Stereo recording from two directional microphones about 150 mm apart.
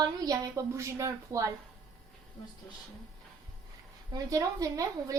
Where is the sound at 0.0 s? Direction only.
25° right (ahead or behind).